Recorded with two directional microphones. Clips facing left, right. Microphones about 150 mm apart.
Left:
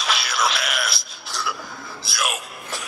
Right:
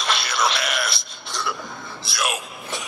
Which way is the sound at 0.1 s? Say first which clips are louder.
Right 1 dB; centre (ahead or behind).